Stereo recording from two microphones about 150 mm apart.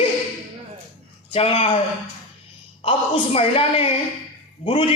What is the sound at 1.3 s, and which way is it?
Speech, 35° left (ahead or behind).